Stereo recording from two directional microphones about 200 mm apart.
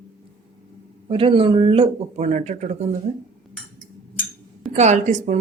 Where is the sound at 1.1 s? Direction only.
25° right (ahead or behind).